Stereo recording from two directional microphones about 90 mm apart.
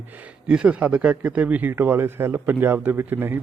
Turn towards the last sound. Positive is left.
turn(degrees=-25)  # may be behind; listen again after turning